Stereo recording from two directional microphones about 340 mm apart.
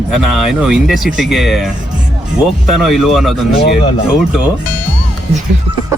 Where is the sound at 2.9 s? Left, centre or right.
Centre.